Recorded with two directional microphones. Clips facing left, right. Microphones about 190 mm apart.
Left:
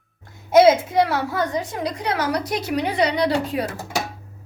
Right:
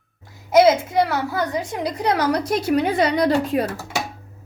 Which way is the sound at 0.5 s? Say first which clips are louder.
Left 1 dB; centre (ahead or behind).